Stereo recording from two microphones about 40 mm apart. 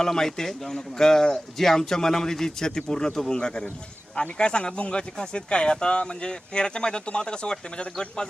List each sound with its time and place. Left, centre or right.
0.0 s a man's voice: centre